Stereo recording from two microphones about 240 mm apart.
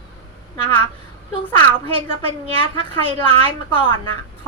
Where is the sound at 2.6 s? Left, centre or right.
Left.